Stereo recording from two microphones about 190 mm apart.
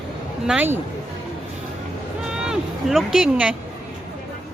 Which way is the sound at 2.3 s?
5° right (ahead or behind).